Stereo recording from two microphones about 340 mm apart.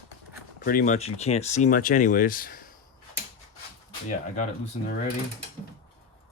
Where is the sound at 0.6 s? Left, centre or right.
Left.